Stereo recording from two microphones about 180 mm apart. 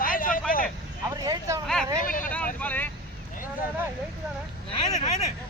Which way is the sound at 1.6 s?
5° left (ahead or behind).